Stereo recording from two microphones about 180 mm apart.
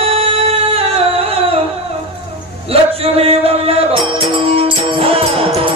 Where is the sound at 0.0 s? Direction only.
30° right (ahead or behind).